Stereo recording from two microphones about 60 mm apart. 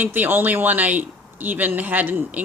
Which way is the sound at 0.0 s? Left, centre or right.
Right.